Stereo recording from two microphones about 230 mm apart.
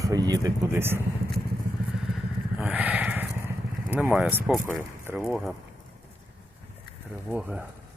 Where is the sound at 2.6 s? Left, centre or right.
Centre.